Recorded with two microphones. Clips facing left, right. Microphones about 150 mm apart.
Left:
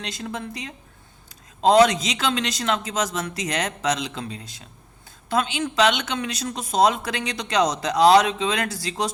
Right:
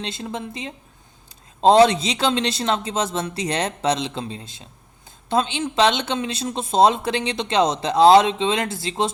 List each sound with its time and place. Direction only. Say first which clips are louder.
0.0 s speech: right 2 dB; 25° right (ahead or behind)